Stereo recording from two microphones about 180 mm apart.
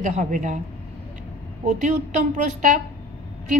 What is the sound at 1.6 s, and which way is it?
A woman's voice, 45° right (ahead or behind).